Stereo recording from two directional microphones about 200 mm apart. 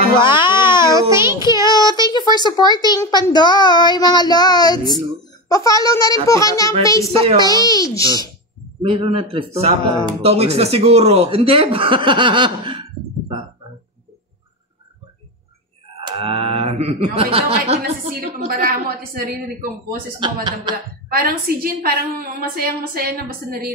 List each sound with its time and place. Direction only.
0.2 s baby cry: 25° left (ahead or behind)
0.8 s a child's voice: 15° right (ahead or behind)
1.6 s a child's voice: 20° left (ahead or behind)
8.8 s speech: 25° right (ahead or behind)
16.0 s speech: 25° right (ahead or behind)
18.5 s a woman's voice: 50° right (ahead or behind)
20.1 s speech: 25° right (ahead or behind)
21.1 s a woman's voice: 45° right (ahead or behind)